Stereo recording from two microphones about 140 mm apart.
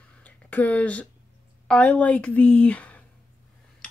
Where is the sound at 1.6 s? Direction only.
10° left (ahead or behind).